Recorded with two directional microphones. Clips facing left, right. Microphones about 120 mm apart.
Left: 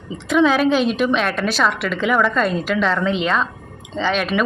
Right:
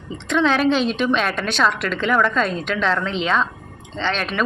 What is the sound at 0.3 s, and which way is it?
A woman's voice, 5° left (ahead or behind).